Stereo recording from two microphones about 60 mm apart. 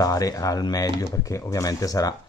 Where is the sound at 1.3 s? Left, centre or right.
Left.